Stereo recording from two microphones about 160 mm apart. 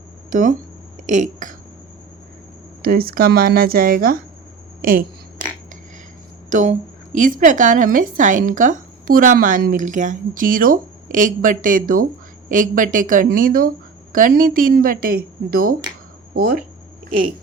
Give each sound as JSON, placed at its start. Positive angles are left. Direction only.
{"t": 0.3, "sound": "speech", "side_deg": -55}
{"t": 2.8, "sound": "a woman's voice", "side_deg": -70}
{"t": 4.8, "sound": "a sound", "side_deg": -60}
{"t": 6.5, "sound": "a woman's voice", "side_deg": -50}